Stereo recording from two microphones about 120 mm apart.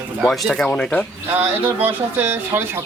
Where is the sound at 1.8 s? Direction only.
15° right (ahead or behind).